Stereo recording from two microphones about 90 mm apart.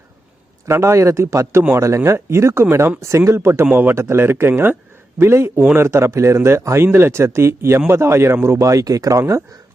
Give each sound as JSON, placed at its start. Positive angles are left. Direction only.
{"t": 0.6, "sound": "a man's voice", "side_deg": -30}